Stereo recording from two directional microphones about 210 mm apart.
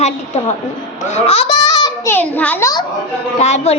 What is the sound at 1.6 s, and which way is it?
A child's voice, 15° left (ahead or behind).